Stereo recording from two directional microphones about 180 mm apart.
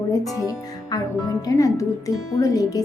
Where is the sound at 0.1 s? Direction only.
20° left (ahead or behind).